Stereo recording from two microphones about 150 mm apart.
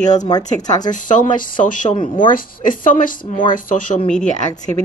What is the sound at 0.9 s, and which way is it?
Speech, 60° left (ahead or behind).